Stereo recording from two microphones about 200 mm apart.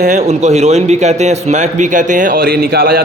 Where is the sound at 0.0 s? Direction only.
35° right (ahead or behind).